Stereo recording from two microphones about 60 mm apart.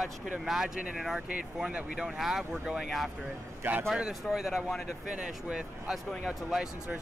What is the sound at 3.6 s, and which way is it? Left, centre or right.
Speech, right.